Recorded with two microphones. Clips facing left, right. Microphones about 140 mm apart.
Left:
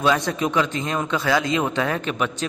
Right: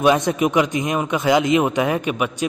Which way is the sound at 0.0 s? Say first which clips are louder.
Right 4 dB; 20° right (ahead or behind).